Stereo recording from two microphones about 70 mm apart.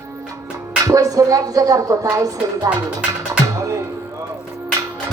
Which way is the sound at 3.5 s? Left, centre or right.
Right.